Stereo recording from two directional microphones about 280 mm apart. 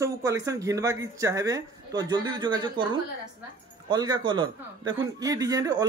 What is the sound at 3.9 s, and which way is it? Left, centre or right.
Speech, centre.